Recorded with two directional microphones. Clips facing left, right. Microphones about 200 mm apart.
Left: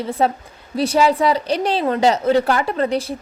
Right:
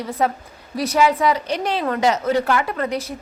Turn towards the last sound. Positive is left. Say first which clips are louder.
# left 4 dB
turn(degrees=30)  # may be behind; listen again after turning